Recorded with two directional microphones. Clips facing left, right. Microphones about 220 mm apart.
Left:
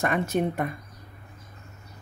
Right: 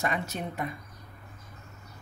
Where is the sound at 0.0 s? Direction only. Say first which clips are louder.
Left 7 dB; 55° left (ahead or behind).